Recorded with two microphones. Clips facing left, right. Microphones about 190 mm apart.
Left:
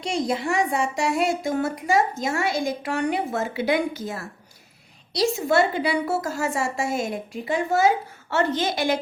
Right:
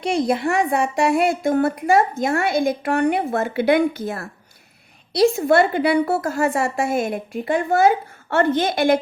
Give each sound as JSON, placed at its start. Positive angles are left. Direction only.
{"t": 0.0, "sound": "a woman's voice", "side_deg": -60}